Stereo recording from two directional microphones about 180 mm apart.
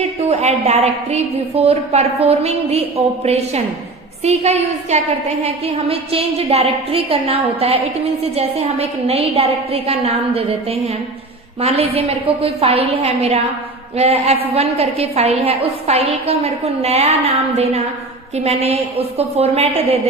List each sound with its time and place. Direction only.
0.3 s a woman's voice: 40° right (ahead or behind)